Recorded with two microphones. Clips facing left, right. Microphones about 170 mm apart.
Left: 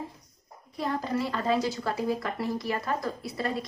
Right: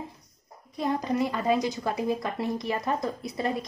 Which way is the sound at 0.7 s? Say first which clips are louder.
Right 3 dB; 15° right (ahead or behind).